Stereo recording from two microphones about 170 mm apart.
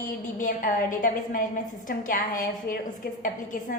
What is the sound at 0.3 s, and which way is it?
A woman's voice, 55° left (ahead or behind).